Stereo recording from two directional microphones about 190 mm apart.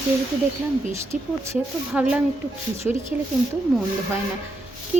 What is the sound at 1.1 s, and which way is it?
Speech, 15° right (ahead or behind).